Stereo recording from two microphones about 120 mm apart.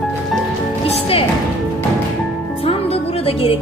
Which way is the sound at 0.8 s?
50° left (ahead or behind).